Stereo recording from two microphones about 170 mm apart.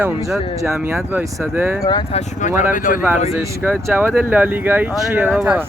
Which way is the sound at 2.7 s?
50° left (ahead or behind).